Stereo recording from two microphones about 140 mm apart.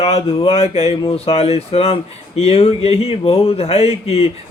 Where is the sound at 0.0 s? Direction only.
45° left (ahead or behind).